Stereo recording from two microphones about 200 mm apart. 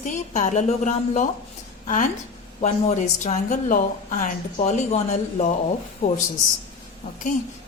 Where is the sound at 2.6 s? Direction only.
35° left (ahead or behind).